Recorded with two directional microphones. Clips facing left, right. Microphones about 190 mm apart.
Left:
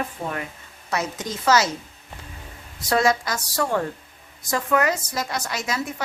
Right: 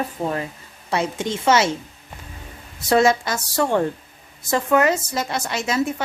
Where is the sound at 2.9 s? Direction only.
25° right (ahead or behind).